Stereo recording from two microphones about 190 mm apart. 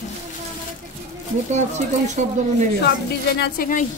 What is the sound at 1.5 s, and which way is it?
Speech, 40° right (ahead or behind).